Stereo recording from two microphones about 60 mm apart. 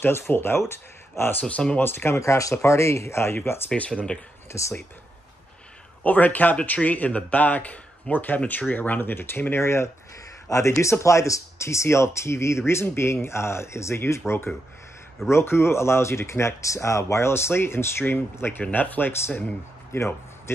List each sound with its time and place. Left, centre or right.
0.0 s speech: left
1.4 s speech: centre
1.8 s speech: left
2.1 s speech: left
3.3 s speech: left
3.7 s speech: left
4.5 s speech: left
6.0 s speech: left
19.9 s speech: left